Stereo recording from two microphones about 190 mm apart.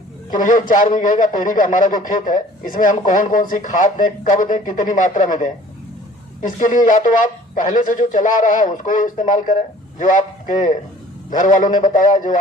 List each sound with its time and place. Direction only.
0.3 s a man's voice: 40° left (ahead or behind)